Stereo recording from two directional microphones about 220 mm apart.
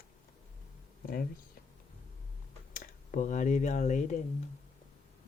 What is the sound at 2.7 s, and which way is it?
Speech, 40° left (ahead or behind).